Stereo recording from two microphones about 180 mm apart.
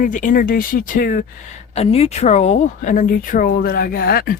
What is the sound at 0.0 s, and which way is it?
Speech, 45° left (ahead or behind).